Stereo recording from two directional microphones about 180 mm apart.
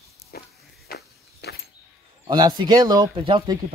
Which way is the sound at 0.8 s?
65° left (ahead or behind).